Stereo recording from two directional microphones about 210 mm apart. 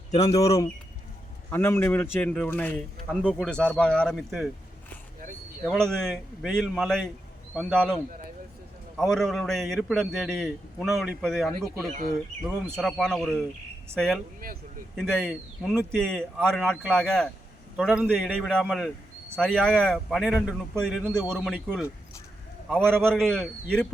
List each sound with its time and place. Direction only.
0.1 s a man's voice: 20° left (ahead or behind); by 4.5 s centre (ahead or behind)
5.6 s a man's voice: 5° left (ahead or behind)
9.0 s a man's voice: centre (ahead or behind)
12.7 s a man's voice: centre (ahead or behind)
21.3 s a man's voice: centre (ahead or behind)
22.7 s a man's voice: 10° right (ahead or behind)
23.1 s a man's voice: centre (ahead or behind)